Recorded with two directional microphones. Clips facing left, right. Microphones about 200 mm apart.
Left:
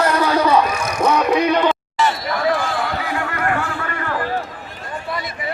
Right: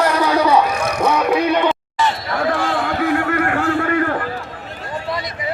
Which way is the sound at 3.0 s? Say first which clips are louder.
Right 6 dB; 55° right (ahead or behind).